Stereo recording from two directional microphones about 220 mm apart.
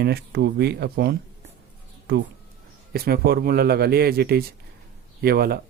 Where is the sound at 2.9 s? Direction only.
45° right (ahead or behind).